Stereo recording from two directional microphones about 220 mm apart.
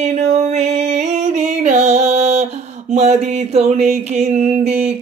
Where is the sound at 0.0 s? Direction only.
30° right (ahead or behind).